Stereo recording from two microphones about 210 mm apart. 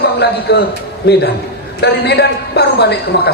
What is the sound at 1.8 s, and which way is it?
A man's voice, 50° left (ahead or behind).